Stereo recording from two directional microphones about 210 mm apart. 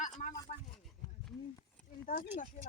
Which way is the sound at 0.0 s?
40° left (ahead or behind).